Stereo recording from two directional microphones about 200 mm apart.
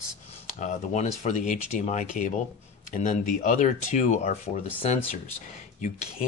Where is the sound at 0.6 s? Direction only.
35° left (ahead or behind).